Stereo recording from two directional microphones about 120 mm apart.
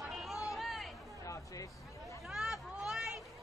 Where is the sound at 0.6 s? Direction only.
Centre (ahead or behind).